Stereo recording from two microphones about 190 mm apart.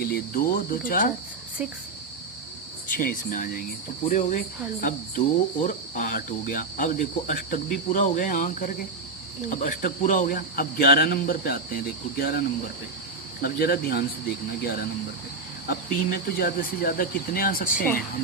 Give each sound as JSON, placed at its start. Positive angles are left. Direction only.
{"t": 0.0, "sound": "speech", "side_deg": 50}
{"t": 2.9, "sound": "speech", "side_deg": 50}
{"t": 13.4, "sound": "speech", "side_deg": 55}